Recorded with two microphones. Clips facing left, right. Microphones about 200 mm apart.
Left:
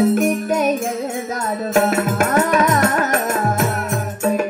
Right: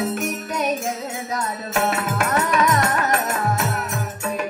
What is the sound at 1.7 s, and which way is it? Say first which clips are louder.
Music: left 6 dB; 45° left (ahead or behind).